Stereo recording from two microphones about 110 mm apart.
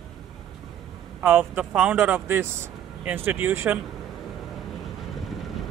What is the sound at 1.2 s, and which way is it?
Speech, 15° right (ahead or behind).